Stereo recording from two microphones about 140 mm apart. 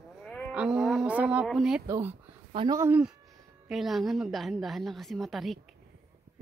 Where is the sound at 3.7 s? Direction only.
Centre (ahead or behind).